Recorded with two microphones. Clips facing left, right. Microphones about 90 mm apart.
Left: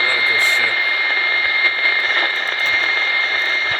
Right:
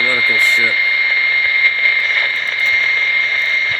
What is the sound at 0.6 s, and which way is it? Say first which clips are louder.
Vehicle: right 3 dB; 35° left (ahead or behind).